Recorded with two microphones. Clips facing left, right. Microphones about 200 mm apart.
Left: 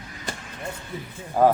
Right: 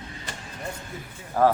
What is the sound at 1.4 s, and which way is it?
Speech, 15° left (ahead or behind).